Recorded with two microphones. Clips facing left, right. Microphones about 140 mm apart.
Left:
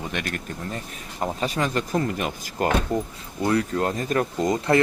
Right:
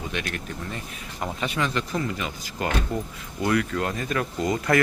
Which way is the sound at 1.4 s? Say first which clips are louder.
Left 1 dB; 40° left (ahead or behind).